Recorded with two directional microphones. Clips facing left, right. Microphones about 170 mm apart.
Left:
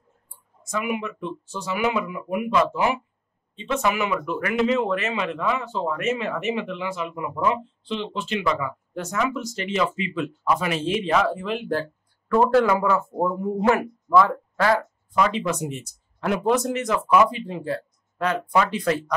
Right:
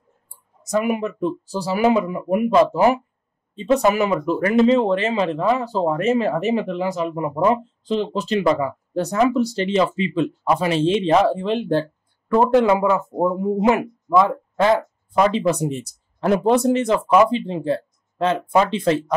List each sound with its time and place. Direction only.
0.3 s a man's voice: 40° right (ahead or behind); by 15.2 s 20° right (ahead or behind)
15.2 s speech: 35° right (ahead or behind)